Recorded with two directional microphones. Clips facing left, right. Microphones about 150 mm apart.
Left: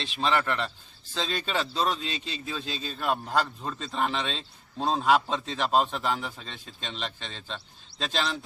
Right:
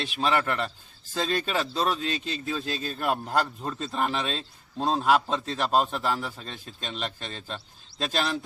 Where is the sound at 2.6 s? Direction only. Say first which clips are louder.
Right 3 dB; 50° right (ahead or behind).